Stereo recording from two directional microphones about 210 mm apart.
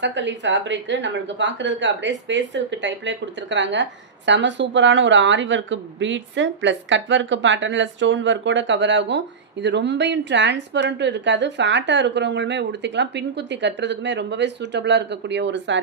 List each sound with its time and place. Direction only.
0.0 s a woman's voice: 60° right (ahead or behind)